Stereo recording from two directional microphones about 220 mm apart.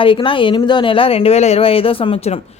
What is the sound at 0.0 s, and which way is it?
Speech, 25° left (ahead or behind).